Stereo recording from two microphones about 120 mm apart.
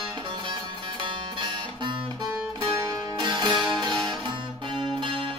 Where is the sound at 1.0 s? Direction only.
40° right (ahead or behind).